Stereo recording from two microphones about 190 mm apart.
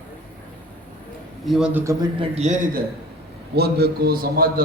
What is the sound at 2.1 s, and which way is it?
Speech, 30° right (ahead or behind).